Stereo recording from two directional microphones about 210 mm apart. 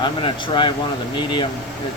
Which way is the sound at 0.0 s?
20° left (ahead or behind).